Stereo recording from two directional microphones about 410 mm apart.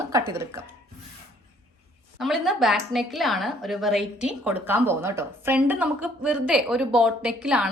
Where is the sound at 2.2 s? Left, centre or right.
Centre.